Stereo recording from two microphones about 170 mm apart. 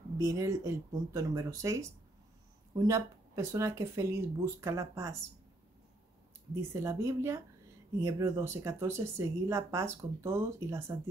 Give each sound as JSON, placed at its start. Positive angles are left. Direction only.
{"t": 0.2, "sound": "speech", "side_deg": -20}
{"t": 6.5, "sound": "speech", "side_deg": -15}